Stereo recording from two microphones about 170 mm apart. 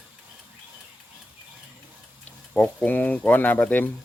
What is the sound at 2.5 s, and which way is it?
Speech, 5° left (ahead or behind).